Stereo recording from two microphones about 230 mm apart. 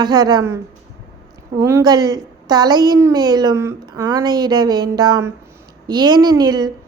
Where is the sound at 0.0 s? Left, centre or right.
Centre.